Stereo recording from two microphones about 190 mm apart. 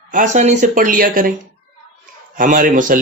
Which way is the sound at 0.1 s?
40° right (ahead or behind).